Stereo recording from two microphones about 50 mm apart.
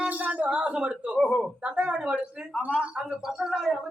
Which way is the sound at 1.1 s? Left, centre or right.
Centre.